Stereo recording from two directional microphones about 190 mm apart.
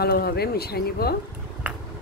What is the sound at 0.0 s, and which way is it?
A woman's voice, 55° left (ahead or behind).